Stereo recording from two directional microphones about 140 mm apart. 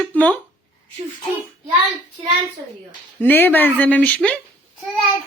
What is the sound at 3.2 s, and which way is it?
Speech, 15° left (ahead or behind).